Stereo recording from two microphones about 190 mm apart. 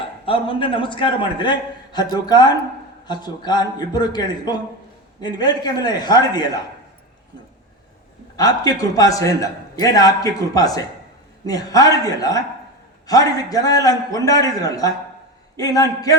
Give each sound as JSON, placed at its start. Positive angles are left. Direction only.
{"t": 0.3, "sound": "a man's voice", "side_deg": 30}
{"t": 8.4, "sound": "a man's voice", "side_deg": 20}